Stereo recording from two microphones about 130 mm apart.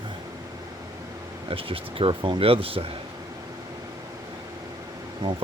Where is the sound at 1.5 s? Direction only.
45° right (ahead or behind).